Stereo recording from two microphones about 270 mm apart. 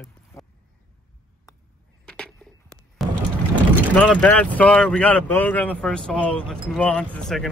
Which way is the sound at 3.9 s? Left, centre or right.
Centre.